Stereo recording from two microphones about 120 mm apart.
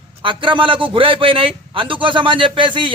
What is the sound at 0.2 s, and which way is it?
A man's voice, 45° right (ahead or behind).